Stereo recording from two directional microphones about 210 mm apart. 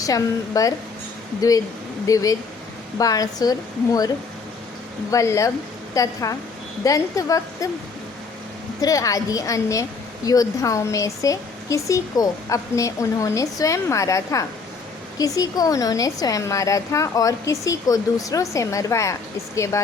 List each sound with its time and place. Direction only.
0.0 s speech: 15° left (ahead or behind)
5.1 s speech: 15° left (ahead or behind)
8.8 s speech: 15° left (ahead or behind)